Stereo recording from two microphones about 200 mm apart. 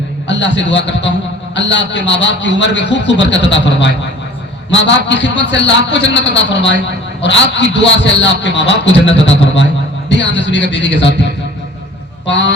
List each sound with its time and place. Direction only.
0.3 s a man's voice: 65° left (ahead or behind)